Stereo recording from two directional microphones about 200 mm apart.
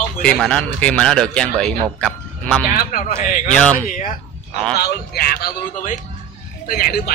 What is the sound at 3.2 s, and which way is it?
Speech, 40° left (ahead or behind).